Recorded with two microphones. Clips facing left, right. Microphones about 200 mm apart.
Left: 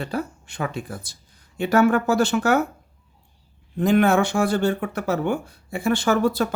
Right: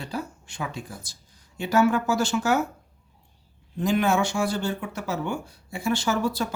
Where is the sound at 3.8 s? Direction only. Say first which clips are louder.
Left 5 dB; 60° left (ahead or behind).